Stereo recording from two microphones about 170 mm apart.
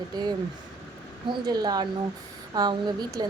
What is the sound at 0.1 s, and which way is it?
A woman's voice, 25° right (ahead or behind).